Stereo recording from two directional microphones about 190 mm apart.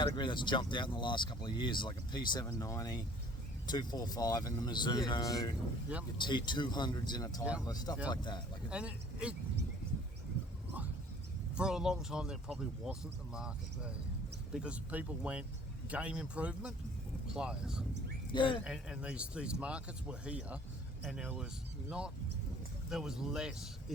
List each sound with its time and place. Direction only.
0.0 s speech: 25° left (ahead or behind)
8.7 s speech: 5° right (ahead or behind)
11.5 s speech: 5° right (ahead or behind)
18.3 s speech: 25° left (ahead or behind)
18.6 s speech: 5° right (ahead or behind)